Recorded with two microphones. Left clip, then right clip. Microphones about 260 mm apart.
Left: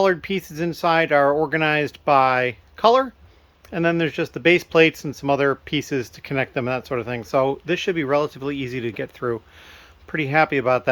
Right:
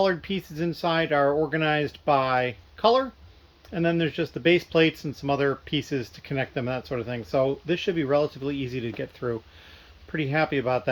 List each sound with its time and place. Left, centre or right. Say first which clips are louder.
0.0 s speech: left 5 dB; centre